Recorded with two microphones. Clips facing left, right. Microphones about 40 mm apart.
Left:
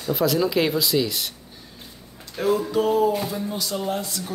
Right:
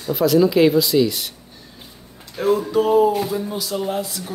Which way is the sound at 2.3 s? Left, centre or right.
Centre.